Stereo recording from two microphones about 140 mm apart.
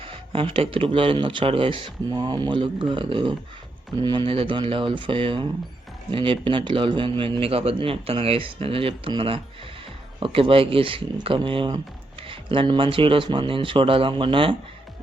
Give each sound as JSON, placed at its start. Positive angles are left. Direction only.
{"t": 0.0, "sound": "speech", "side_deg": -40}